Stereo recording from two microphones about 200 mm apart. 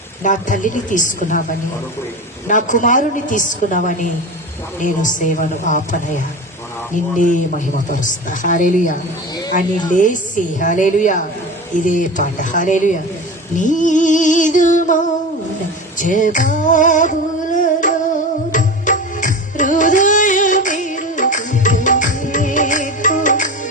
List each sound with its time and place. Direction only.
0.2 s a woman's voice: 40° left (ahead or behind)
16.0 s female singing: 40° left (ahead or behind)
18.5 s music: 40° left (ahead or behind)